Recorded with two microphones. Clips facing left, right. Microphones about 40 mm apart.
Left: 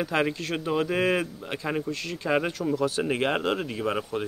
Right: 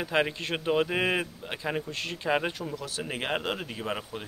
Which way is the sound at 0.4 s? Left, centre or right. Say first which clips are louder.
Even; right.